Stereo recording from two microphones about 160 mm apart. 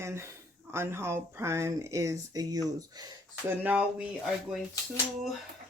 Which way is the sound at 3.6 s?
10° right (ahead or behind).